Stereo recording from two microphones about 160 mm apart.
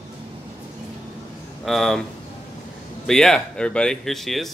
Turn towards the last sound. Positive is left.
turn(degrees=0)  # may be behind; listen again after turning